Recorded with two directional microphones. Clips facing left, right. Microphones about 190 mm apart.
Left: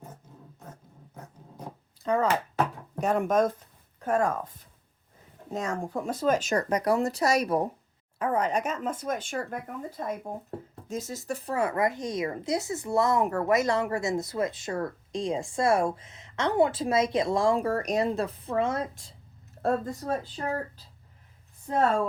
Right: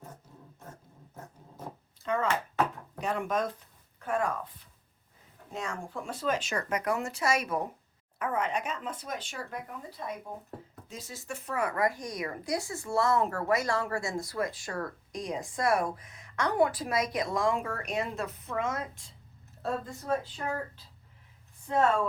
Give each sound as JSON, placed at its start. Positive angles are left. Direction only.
{"t": 1.1, "sound": "dog", "side_deg": 15}
{"t": 2.0, "sound": "speech", "side_deg": 35}
{"t": 19.6, "sound": "speech", "side_deg": 45}